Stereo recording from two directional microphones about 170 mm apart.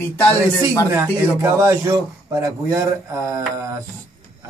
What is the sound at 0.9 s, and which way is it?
A man's voice, 20° right (ahead or behind).